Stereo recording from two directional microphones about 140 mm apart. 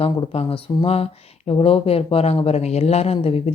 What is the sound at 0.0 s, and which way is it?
A woman's voice, 40° left (ahead or behind).